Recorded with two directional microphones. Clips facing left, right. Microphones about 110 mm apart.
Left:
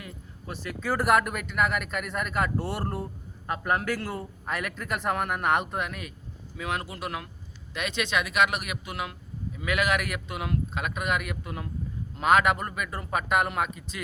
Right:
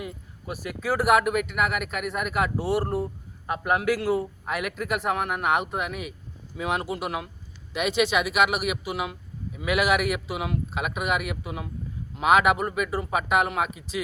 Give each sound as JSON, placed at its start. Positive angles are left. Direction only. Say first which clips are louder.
{"t": 0.0, "sound": "speech", "louder": "right 6 dB", "side_deg": -10}